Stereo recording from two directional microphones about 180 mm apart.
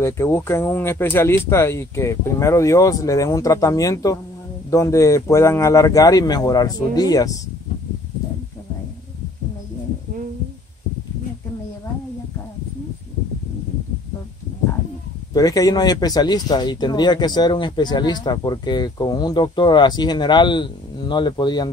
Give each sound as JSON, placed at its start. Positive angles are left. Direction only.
{"t": 0.0, "sound": "speech", "side_deg": 15}
{"t": 15.3, "sound": "speech", "side_deg": 20}